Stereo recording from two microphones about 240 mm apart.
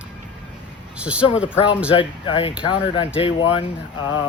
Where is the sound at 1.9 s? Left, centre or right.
Left.